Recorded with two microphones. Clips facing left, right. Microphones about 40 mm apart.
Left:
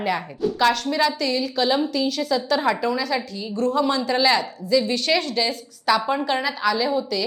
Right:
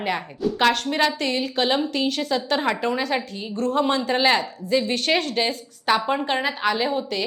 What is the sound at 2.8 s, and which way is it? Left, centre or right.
A woman's voice, right.